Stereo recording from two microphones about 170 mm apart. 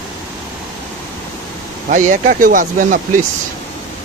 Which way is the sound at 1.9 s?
50° right (ahead or behind).